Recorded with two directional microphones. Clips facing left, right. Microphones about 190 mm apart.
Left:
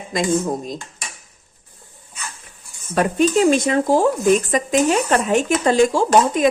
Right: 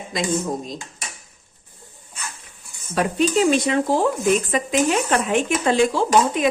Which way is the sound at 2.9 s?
50° left (ahead or behind).